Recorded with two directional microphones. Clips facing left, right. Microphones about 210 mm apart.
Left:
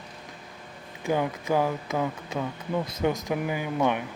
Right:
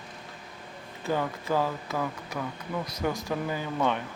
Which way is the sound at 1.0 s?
15° left (ahead or behind).